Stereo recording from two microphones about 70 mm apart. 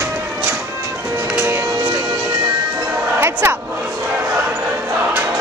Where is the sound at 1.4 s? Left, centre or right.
Right.